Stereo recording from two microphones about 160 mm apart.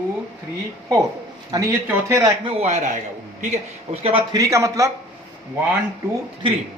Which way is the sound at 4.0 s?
35° right (ahead or behind).